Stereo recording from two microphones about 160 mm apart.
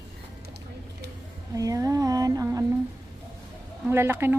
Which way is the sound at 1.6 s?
20° right (ahead or behind).